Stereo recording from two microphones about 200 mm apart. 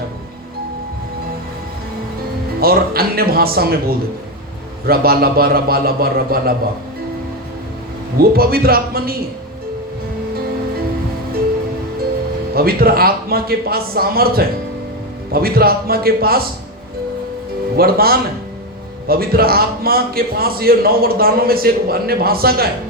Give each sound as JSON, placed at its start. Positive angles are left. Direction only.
{"t": 2.6, "sound": "a man's voice", "side_deg": -50}
{"t": 8.2, "sound": "a man's voice", "side_deg": -50}
{"t": 12.5, "sound": "a man's voice", "side_deg": -50}
{"t": 17.7, "sound": "a man's voice", "side_deg": -50}